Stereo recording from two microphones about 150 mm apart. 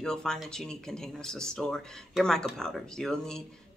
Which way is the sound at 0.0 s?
5° left (ahead or behind).